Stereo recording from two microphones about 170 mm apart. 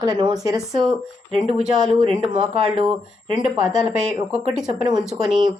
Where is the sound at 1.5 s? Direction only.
40° right (ahead or behind).